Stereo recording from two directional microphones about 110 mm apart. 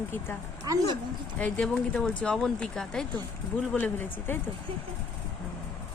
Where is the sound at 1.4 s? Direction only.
10° left (ahead or behind).